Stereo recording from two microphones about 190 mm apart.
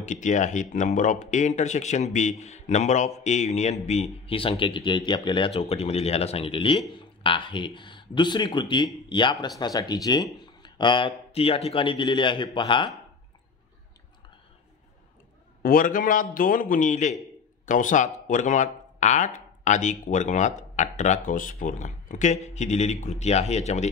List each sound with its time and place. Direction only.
0.0 s speech: 40° left (ahead or behind); by 12.9 s 25° left (ahead or behind)
15.6 s a man's voice: 45° left (ahead or behind)